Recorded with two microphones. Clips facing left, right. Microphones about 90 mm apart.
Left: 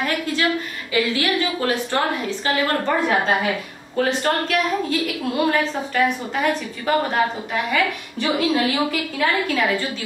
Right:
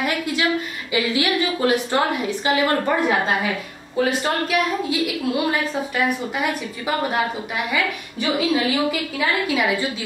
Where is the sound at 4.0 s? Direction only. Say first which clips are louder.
Even; 10° right (ahead or behind).